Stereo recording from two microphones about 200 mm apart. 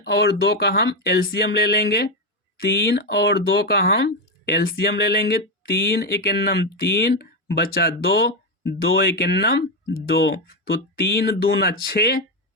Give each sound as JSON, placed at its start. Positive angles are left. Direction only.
{"t": 0.0, "sound": "speech", "side_deg": 55}